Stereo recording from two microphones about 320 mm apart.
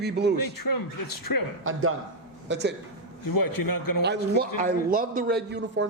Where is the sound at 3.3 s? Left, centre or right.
Left.